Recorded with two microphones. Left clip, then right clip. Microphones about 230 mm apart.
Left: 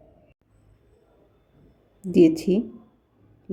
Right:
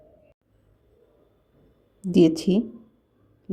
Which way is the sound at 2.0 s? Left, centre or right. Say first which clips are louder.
Left 1 dB; centre.